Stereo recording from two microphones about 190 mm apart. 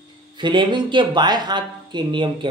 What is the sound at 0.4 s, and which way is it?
Speech, 25° right (ahead or behind).